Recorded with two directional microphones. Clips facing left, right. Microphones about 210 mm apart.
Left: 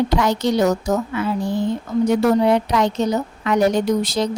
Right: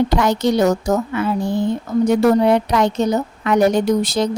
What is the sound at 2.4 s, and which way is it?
Speech, 55° right (ahead or behind).